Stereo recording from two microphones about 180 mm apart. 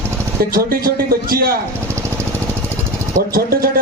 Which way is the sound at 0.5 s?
55° right (ahead or behind).